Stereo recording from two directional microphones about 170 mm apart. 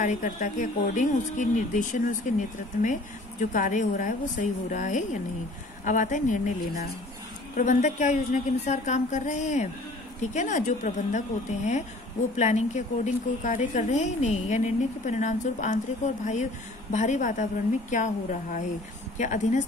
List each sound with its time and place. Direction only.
0.0 s speech: 45° left (ahead or behind)
7.5 s speech: 45° left (ahead or behind)
16.9 s speech: 45° left (ahead or behind)